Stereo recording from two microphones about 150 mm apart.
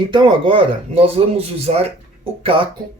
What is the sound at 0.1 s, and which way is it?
Speech, 35° right (ahead or behind).